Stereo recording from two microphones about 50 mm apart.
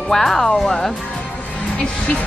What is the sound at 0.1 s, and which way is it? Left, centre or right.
Speech, centre.